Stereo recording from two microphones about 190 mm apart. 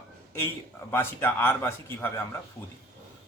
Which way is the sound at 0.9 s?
10° left (ahead or behind).